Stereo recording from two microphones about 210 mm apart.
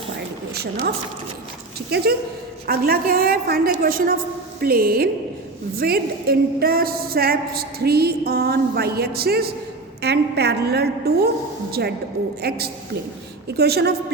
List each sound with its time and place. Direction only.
0.5 s a woman's voice: 50° right (ahead or behind)
2.6 s a woman's voice: 45° right (ahead or behind)